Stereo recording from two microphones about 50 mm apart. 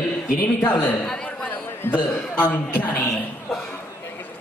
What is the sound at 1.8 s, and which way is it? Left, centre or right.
A man's voice, left.